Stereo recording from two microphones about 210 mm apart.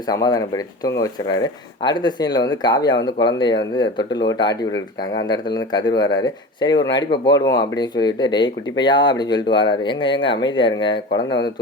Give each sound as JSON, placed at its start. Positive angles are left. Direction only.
{"t": 0.1, "sound": "speech", "side_deg": 15}